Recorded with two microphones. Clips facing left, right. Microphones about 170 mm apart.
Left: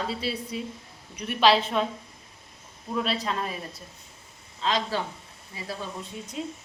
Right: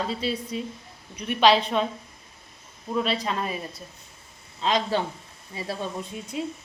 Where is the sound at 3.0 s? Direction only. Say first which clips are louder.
Right 2 dB; centre (ahead or behind).